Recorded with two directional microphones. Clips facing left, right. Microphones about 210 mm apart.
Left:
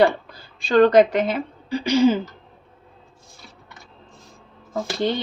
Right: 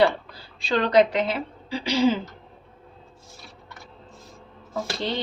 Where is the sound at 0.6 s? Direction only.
50° left (ahead or behind).